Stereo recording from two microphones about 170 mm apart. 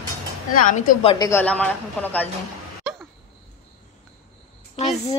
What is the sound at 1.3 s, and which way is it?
Speech, 10° left (ahead or behind).